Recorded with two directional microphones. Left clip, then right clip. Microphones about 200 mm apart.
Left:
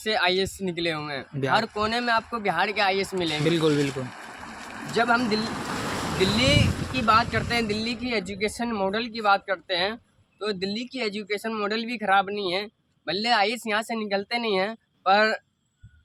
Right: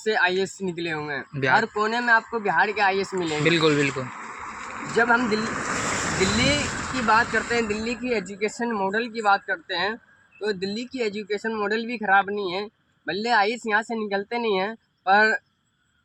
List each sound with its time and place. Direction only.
0.1 s speech: 25° left (ahead or behind)
4.3 s a sound: 50° left (ahead or behind)
4.9 s speech: 20° left (ahead or behind)
5.5 s vehicle: 40° left (ahead or behind)
7.2 s speech: 30° left (ahead or behind)